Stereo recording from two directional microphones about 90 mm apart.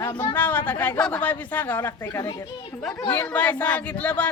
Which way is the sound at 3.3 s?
15° left (ahead or behind).